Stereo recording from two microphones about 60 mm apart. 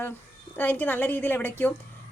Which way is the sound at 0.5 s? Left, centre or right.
Left.